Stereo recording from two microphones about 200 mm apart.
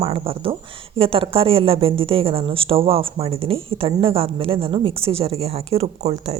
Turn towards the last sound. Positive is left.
turn(degrees=-30)  # may be behind; listen again after turning